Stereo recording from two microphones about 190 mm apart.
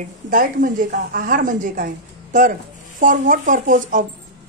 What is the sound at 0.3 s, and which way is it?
A woman's voice, 45° right (ahead or behind).